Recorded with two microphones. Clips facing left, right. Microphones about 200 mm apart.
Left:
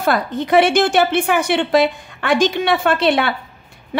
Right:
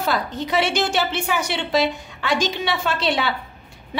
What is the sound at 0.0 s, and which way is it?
A woman's voice, 55° left (ahead or behind).